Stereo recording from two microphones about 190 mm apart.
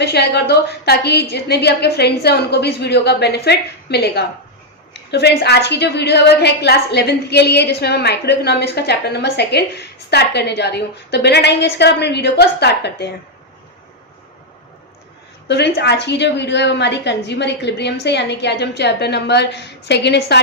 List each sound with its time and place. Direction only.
0.0 s a woman's voice: 60° left (ahead or behind)
15.4 s a woman's voice: 60° left (ahead or behind)